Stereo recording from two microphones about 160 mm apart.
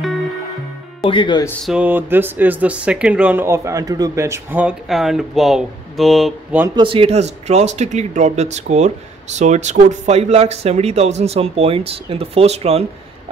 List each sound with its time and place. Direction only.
1.0 s speech: 30° left (ahead or behind)
1.6 s speech: 5° right (ahead or behind)
6.7 s speech: 30° right (ahead or behind)